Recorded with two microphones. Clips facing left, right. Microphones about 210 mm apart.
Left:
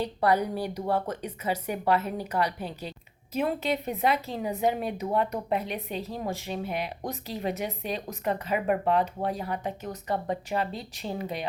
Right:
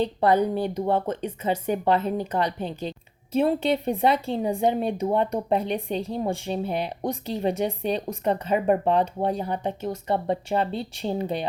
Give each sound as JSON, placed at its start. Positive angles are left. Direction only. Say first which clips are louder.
{"t": 0.0, "sound": "speech", "louder": "right 4 dB", "side_deg": -25}